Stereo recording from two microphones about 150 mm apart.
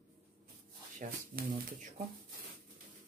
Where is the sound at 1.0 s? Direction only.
55° right (ahead or behind).